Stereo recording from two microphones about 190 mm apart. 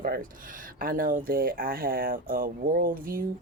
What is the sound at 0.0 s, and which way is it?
Speech, 45° right (ahead or behind).